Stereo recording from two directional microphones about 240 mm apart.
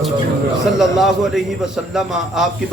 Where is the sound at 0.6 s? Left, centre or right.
Centre.